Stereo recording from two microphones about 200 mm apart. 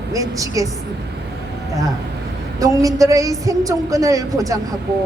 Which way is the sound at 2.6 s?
15° right (ahead or behind).